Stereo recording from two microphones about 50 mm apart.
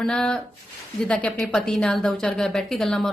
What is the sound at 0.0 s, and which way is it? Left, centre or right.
A woman's voice, centre.